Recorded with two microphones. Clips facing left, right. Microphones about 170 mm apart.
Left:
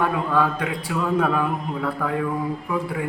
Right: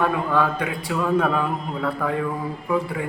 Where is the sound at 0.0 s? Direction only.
5° left (ahead or behind).